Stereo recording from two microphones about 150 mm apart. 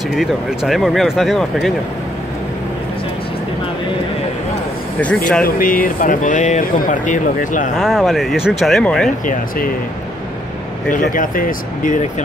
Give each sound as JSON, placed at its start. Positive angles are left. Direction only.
{"t": 0.1, "sound": "speech", "side_deg": -5}
{"t": 5.4, "sound": "speech", "side_deg": 70}
{"t": 7.8, "sound": "speech", "side_deg": 0}
{"t": 9.2, "sound": "speech", "side_deg": 65}
{"t": 10.9, "sound": "speech", "side_deg": 65}